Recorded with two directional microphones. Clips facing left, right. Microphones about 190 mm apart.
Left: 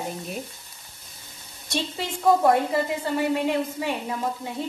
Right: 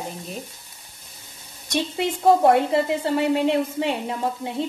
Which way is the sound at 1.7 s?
20° right (ahead or behind).